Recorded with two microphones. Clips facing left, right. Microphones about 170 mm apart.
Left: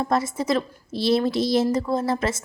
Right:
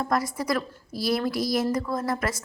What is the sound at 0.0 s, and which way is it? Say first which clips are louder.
A woman's voice: left 3 dB; 25° left (ahead or behind).